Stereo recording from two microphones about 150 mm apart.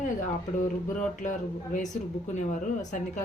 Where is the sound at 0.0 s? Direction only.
60° left (ahead or behind).